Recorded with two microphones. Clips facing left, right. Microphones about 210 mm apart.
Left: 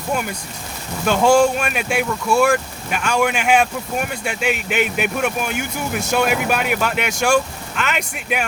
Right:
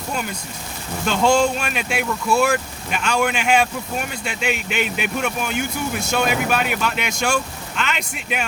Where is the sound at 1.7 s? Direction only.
50° left (ahead or behind).